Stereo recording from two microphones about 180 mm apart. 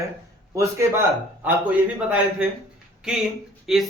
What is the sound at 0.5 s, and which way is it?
Speech, 15° right (ahead or behind).